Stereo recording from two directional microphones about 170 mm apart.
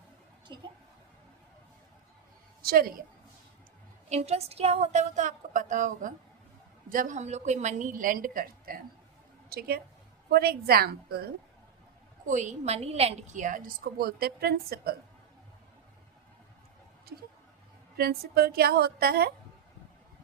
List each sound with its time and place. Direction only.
2.6 s a woman's voice: 60° right (ahead or behind)
4.1 s a woman's voice: 40° right (ahead or behind); by 11.3 s 65° right (ahead or behind)
12.2 s a woman's voice: 45° right (ahead or behind); by 14.9 s 65° right (ahead or behind)
17.1 s a woman's voice: 65° right (ahead or behind)